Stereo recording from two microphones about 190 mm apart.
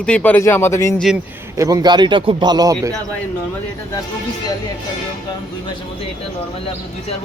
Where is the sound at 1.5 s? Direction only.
15° right (ahead or behind).